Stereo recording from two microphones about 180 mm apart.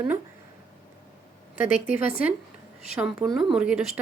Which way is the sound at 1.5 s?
45° left (ahead or behind).